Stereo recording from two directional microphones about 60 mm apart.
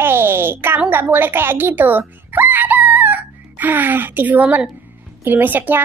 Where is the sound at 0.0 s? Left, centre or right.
Right.